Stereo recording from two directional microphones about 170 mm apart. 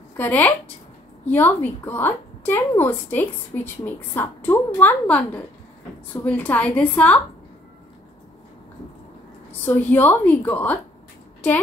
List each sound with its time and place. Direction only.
0.2 s a woman's voice: 10° left (ahead or behind)
9.5 s a woman's voice: 10° left (ahead or behind)